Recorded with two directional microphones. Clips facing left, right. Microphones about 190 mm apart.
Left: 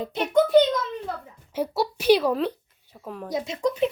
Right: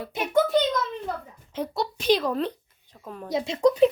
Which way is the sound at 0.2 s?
5° right (ahead or behind).